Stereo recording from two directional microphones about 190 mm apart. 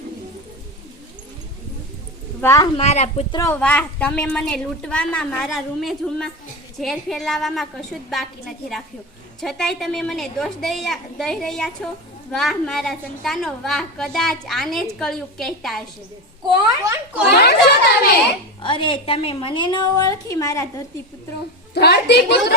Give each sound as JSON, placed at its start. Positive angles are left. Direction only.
{"t": 2.4, "sound": "a woman's voice", "side_deg": 15}
{"t": 2.7, "sound": "speech", "side_deg": 35}
{"t": 3.3, "sound": "a woman's voice", "side_deg": 15}
{"t": 16.5, "sound": "a child's voice", "side_deg": -15}
{"t": 17.2, "sound": "a woman's voice", "side_deg": 60}
{"t": 18.6, "sound": "a woman's voice", "side_deg": 25}
{"t": 21.8, "sound": "a woman's voice", "side_deg": 60}